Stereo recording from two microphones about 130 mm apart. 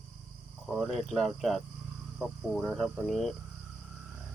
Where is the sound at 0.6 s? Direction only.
Centre (ahead or behind).